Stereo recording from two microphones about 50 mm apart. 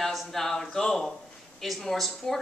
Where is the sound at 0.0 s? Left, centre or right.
Centre.